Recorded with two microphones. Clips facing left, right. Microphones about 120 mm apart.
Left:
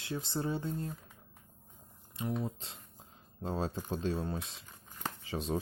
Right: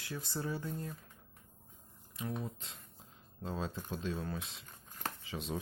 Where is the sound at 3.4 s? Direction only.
35° left (ahead or behind).